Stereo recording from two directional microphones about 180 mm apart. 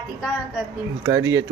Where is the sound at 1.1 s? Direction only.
90° right.